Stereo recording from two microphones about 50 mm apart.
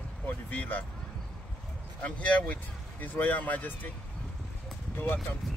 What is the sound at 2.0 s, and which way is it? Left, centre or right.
Speech, left.